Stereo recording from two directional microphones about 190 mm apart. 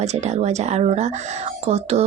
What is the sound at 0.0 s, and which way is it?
Speech, 35° right (ahead or behind).